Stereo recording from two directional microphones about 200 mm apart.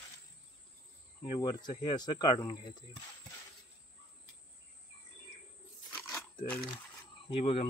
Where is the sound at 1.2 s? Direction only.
20° left (ahead or behind).